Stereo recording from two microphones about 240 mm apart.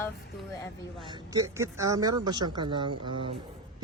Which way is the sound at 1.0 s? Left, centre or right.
Centre.